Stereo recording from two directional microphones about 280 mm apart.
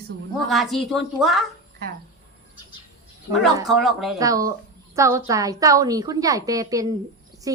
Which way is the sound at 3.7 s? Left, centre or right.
Centre.